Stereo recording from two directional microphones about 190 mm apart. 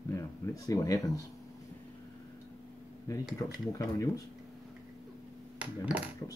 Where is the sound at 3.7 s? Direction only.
15° left (ahead or behind).